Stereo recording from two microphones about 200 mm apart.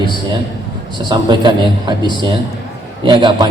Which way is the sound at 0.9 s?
20° right (ahead or behind).